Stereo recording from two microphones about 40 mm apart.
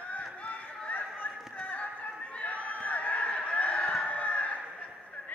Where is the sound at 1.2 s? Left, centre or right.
Left.